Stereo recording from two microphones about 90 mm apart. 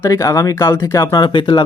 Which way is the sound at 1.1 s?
65° left (ahead or behind).